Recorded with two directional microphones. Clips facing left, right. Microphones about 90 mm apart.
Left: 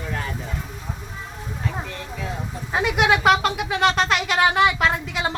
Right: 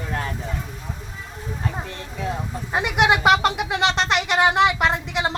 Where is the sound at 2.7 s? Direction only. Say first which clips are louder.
Even; 5° right (ahead or behind).